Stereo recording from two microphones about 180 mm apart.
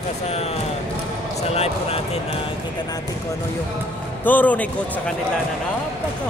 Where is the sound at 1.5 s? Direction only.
35° left (ahead or behind).